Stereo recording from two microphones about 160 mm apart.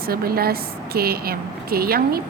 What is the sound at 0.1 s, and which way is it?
A woman's voice, 70° right (ahead or behind).